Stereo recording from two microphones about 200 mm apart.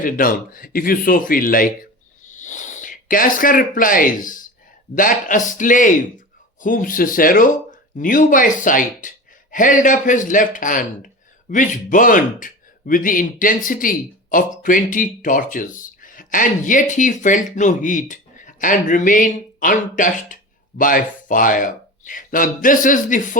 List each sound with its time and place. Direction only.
0.0 s a man's voice: 45° left (ahead or behind)